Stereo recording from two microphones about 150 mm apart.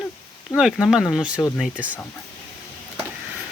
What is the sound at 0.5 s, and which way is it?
Speech, 5° right (ahead or behind).